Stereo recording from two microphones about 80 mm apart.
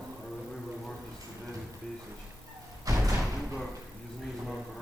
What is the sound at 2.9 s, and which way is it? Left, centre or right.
Music, right.